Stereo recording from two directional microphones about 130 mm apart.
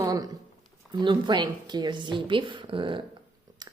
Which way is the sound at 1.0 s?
35° right (ahead or behind).